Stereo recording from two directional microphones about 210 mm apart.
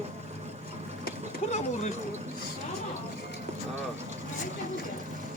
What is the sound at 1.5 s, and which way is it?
Speech, 30° left (ahead or behind).